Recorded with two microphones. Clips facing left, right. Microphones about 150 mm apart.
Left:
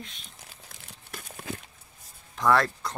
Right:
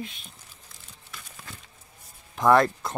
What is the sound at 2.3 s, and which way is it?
Speech, 20° right (ahead or behind).